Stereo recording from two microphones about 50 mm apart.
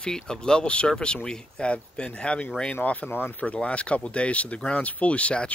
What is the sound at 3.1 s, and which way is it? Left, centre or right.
Speech, left.